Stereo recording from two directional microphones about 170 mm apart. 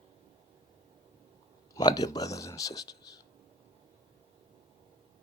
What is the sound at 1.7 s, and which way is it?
Speech, 20° left (ahead or behind).